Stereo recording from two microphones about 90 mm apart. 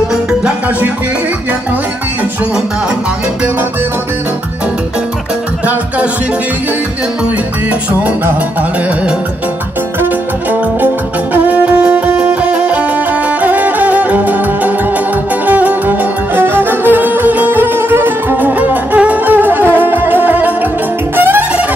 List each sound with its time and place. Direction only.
11.3 s music: 15° right (ahead or behind)